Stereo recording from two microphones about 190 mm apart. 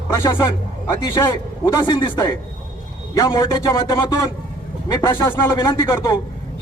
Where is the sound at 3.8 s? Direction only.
15° left (ahead or behind).